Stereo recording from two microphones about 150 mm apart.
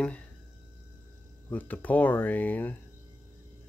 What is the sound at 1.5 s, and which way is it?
Speech, 10° left (ahead or behind).